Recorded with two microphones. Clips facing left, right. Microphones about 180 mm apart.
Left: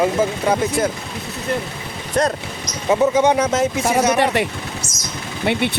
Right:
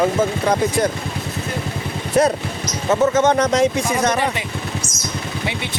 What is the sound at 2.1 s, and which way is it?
Speech, 5° right (ahead or behind).